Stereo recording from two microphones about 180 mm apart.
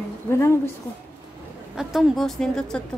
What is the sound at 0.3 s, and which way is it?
Speech, 15° left (ahead or behind).